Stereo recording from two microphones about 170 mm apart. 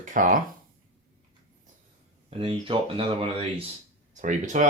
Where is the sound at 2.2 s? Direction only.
30° right (ahead or behind).